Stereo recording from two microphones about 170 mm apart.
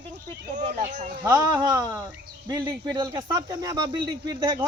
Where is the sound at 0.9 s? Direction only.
45° right (ahead or behind).